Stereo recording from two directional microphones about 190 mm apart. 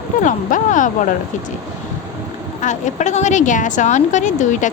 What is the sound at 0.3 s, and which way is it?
Speech, 40° left (ahead or behind).